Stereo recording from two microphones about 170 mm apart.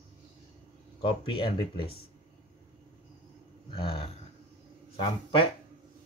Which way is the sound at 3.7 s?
30° left (ahead or behind).